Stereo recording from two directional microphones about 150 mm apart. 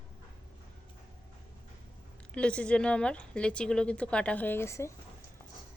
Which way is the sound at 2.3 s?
5° left (ahead or behind).